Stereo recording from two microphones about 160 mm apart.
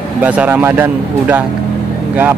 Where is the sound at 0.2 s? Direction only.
10° right (ahead or behind).